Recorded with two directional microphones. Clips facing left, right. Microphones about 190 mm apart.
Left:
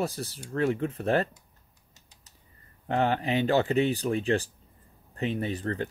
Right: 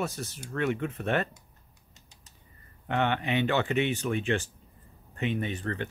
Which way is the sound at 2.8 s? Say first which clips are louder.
Left 2 dB; 35° left (ahead or behind).